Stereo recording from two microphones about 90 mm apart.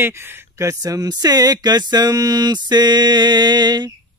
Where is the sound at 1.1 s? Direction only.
45° right (ahead or behind).